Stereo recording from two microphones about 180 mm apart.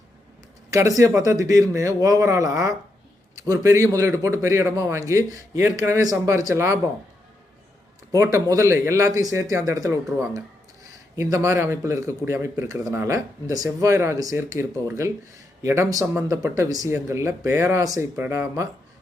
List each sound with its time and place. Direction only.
0.7 s speech: 15° right (ahead or behind)
8.1 s speech: 15° right (ahead or behind)